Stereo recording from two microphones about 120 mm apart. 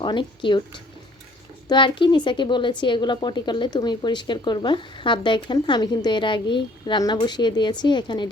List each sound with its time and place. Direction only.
0.0 s speech: 40° left (ahead or behind)
1.6 s speech: 40° left (ahead or behind)